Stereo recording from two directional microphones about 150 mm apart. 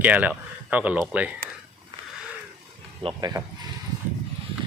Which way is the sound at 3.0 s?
30° right (ahead or behind).